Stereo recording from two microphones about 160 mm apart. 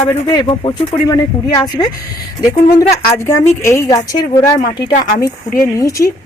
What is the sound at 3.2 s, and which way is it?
A woman's voice, 15° left (ahead or behind).